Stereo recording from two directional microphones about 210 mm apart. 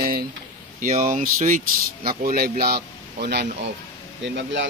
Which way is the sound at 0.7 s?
40° right (ahead or behind).